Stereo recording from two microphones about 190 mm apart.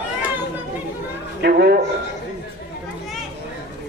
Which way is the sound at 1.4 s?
60° right (ahead or behind).